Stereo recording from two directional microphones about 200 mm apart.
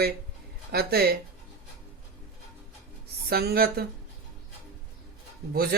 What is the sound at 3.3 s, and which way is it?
Speech, 50° right (ahead or behind).